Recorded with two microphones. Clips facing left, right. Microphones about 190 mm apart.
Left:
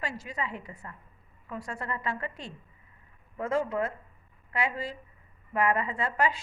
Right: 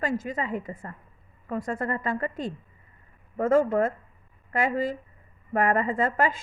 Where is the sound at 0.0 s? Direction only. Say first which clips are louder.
Right 7 dB; 50° right (ahead or behind).